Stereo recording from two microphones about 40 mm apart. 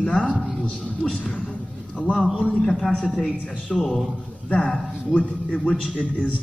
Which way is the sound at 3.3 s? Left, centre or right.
Left.